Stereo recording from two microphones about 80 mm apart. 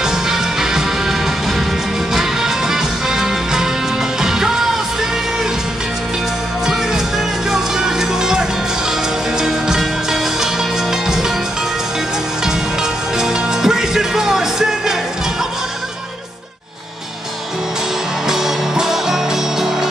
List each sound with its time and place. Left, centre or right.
0.0 s music: centre
2.1 s music: centre
7.5 s music: centre
13.2 s music: centre
18.3 s music: centre